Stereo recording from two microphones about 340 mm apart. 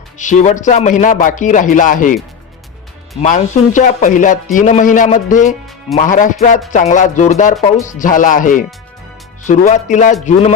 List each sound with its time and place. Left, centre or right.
0.2 s music: left
3.2 s music: left